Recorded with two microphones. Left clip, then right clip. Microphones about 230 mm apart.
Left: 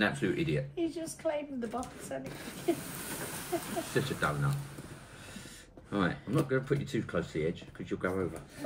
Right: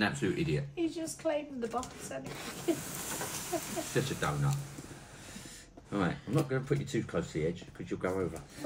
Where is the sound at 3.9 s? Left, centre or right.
Centre.